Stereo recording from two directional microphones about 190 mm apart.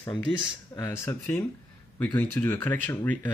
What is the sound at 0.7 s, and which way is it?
Speech, 20° left (ahead or behind).